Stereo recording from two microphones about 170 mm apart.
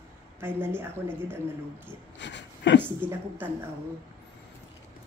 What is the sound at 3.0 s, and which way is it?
Speech, 10° right (ahead or behind).